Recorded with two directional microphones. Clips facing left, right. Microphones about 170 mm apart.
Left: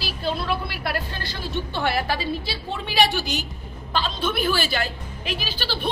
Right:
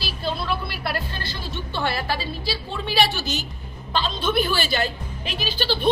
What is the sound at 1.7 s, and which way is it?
A woman's voice, 15° left (ahead or behind).